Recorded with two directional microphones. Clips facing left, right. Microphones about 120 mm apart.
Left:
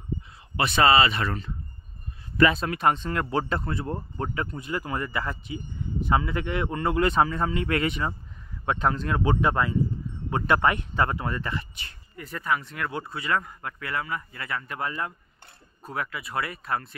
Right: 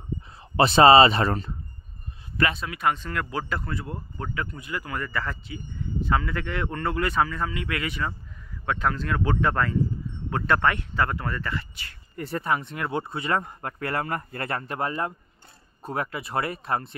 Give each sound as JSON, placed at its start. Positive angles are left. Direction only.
{"t": 0.6, "sound": "speech", "side_deg": -30}
{"t": 2.6, "sound": "speech", "side_deg": 35}
{"t": 7.9, "sound": "speech", "side_deg": 20}
{"t": 12.2, "sound": "speech", "side_deg": -30}